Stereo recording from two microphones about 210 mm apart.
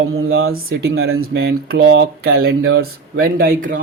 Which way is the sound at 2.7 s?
70° right (ahead or behind).